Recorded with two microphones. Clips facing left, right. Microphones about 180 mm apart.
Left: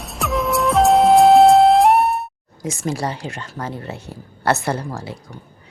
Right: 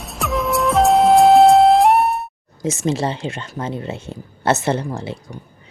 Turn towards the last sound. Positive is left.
turn(degrees=-20)  # may be behind; listen again after turning